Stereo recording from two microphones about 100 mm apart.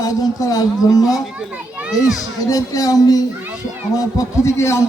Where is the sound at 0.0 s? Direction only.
40° left (ahead or behind).